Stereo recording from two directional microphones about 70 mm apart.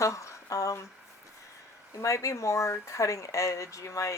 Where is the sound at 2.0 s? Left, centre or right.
Left.